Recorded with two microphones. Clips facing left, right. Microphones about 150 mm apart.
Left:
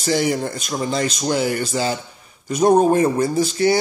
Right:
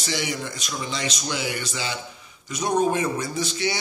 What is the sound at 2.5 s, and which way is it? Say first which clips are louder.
Speech: left 8 dB; 55° left (ahead or behind).